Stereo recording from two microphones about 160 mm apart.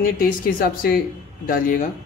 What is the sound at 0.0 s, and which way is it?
Speech, 65° left (ahead or behind).